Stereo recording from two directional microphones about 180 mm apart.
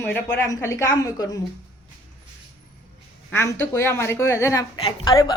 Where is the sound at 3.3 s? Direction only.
10° left (ahead or behind).